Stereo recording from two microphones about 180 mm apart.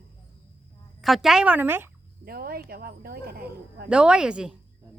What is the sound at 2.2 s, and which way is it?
Speech, 55° right (ahead or behind).